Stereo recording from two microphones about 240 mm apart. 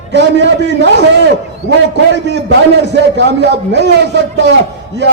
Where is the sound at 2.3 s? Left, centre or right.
Right.